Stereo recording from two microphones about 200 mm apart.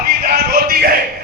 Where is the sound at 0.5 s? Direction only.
50° right (ahead or behind).